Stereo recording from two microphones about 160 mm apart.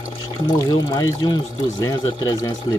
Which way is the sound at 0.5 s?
25° left (ahead or behind).